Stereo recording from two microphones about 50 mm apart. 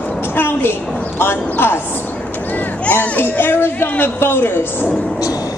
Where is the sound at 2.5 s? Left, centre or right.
Left.